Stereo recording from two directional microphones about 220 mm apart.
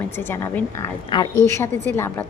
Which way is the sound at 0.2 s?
10° left (ahead or behind).